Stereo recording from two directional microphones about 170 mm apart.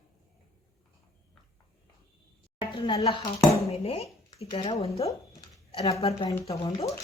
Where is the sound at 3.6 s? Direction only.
35° left (ahead or behind).